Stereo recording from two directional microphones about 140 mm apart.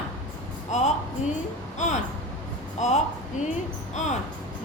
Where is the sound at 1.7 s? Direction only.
60° left (ahead or behind).